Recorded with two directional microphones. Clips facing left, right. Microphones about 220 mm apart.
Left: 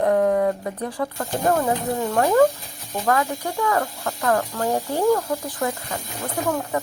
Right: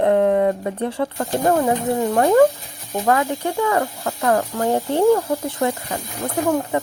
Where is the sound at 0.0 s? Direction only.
25° right (ahead or behind).